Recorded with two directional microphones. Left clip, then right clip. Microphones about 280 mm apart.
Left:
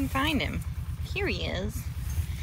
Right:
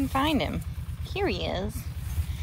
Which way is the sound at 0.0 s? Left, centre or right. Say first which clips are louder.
Right 2 dB; centre.